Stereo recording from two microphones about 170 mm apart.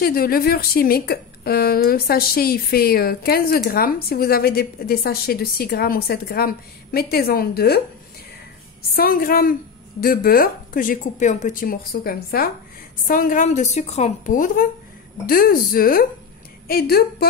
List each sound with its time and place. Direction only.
0.0 s a woman's voice: 60° left (ahead or behind)
8.9 s a woman's voice: 60° left (ahead or behind)